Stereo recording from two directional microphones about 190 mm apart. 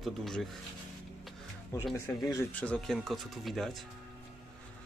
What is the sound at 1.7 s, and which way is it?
Speech, 15° left (ahead or behind).